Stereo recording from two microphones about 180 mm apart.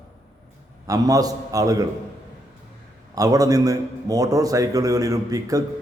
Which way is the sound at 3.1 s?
20° right (ahead or behind).